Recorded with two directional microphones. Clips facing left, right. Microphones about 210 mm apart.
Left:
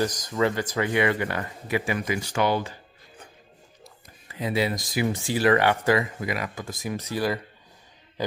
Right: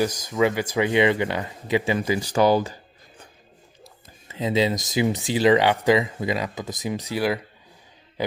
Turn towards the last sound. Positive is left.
turn(degrees=-15)  # may be behind; listen again after turning